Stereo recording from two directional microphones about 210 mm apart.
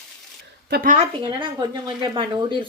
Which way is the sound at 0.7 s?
40° right (ahead or behind).